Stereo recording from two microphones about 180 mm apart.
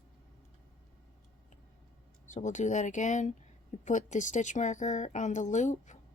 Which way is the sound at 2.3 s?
45° left (ahead or behind).